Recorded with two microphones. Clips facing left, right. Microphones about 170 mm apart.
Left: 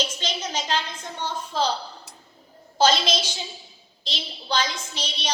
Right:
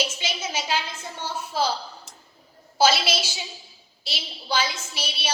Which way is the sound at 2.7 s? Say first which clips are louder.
Even; 10° right (ahead or behind).